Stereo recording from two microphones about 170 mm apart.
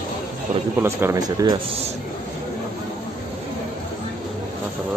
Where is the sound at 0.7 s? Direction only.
15° right (ahead or behind); by 1.9 s 30° right (ahead or behind).